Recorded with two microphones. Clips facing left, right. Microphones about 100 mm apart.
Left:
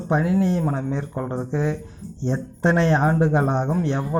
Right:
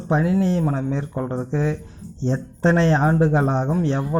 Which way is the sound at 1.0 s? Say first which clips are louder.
Right 1 dB; 10° left (ahead or behind).